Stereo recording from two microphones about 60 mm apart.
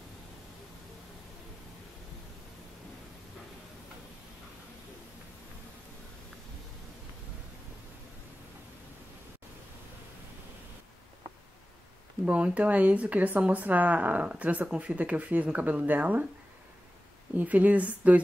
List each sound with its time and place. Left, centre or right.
12.3 s speech: right
17.4 s speech: right